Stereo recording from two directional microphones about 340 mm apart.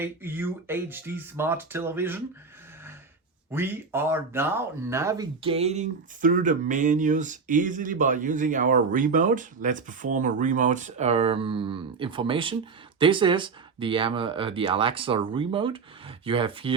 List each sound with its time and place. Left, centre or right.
0.0 s speech: centre
3.5 s speech: centre